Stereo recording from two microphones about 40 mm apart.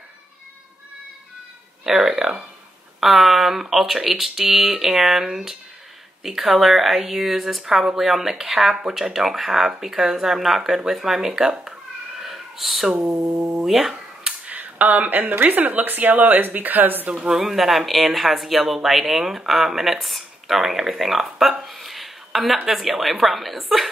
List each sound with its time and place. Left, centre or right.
2.0 s speech: centre
12.2 s a sound: centre
13.7 s speech: centre
14.4 s speech: right
17.3 s speech: centre
21.6 s a sound: centre
22.7 s speech: centre